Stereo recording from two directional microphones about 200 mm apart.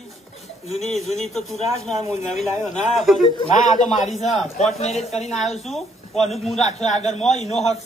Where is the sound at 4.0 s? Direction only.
35° left (ahead or behind).